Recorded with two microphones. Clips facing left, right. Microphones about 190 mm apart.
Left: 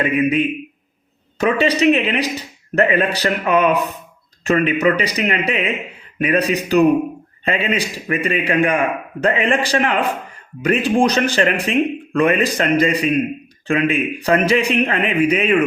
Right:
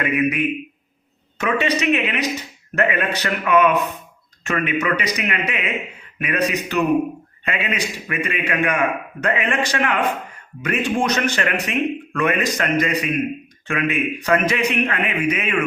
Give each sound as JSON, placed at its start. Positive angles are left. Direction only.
{"t": 0.0, "sound": "a man's voice", "side_deg": 25}